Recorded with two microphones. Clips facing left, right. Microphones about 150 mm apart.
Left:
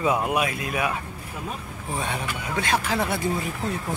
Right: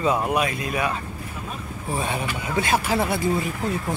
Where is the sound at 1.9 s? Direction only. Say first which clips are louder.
Right 3 dB; 5° right (ahead or behind).